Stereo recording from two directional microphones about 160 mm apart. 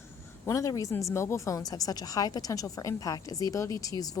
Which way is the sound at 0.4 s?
20° left (ahead or behind).